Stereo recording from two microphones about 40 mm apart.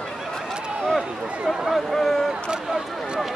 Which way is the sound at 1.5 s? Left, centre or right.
Centre.